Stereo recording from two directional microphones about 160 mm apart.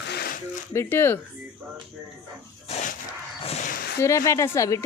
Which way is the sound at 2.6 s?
45° left (ahead or behind).